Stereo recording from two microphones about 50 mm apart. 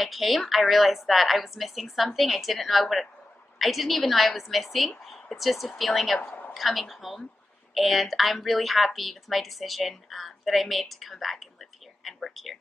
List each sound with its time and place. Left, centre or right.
0.0 s a woman's voice: centre
6.2 s a sound: left
6.5 s a woman's voice: centre